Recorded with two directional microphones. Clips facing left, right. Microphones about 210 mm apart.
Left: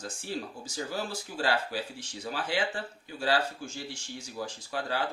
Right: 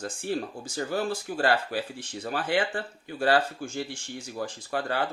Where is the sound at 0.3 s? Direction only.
55° right (ahead or behind).